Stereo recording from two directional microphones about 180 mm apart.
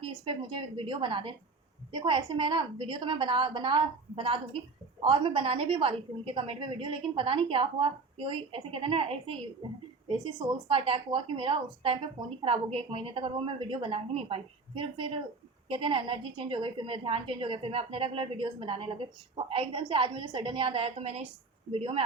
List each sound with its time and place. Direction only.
0.0 s a woman's voice: 25° right (ahead or behind)